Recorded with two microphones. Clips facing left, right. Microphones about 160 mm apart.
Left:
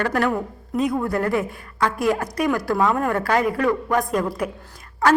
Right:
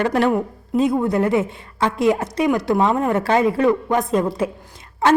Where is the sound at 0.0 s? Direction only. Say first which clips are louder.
Right 4 dB; 25° right (ahead or behind).